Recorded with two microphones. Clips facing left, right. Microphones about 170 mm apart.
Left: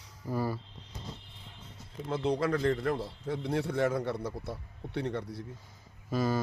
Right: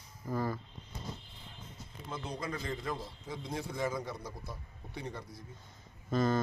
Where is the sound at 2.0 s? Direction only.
70° left (ahead or behind).